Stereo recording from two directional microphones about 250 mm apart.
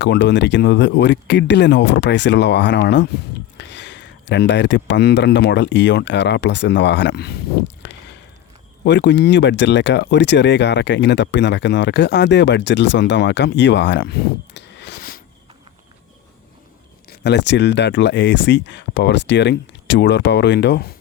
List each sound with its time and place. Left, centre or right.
0.0 s speech: left
17.1 s speech: left